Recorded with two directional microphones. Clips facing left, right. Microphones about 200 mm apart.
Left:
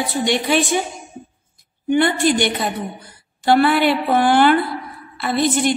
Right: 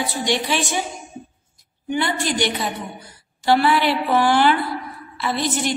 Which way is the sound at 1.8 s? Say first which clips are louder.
Left 7 dB; 55° left (ahead or behind).